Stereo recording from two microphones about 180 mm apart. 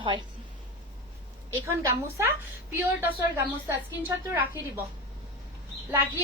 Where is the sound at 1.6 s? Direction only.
15° right (ahead or behind).